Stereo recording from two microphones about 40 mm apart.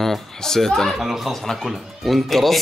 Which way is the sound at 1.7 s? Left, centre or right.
Centre.